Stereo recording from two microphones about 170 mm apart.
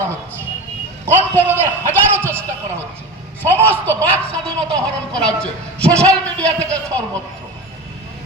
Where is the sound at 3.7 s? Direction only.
10° left (ahead or behind).